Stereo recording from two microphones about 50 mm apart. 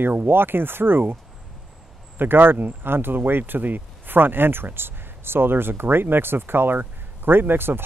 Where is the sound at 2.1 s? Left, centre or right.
Right.